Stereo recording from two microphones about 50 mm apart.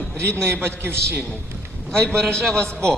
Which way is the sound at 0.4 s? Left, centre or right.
Right.